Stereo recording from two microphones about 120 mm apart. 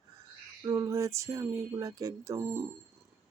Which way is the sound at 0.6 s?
30° right (ahead or behind).